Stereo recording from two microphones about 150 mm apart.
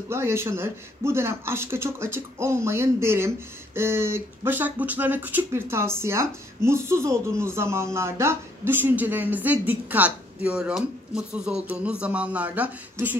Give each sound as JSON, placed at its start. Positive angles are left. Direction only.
{"t": 0.1, "sound": "speech", "side_deg": -15}